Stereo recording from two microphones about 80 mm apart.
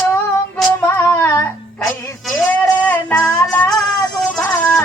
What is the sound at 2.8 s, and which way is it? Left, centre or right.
Female singing, left.